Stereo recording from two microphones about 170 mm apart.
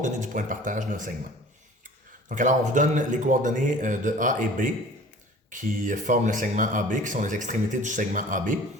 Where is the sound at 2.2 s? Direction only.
50° right (ahead or behind).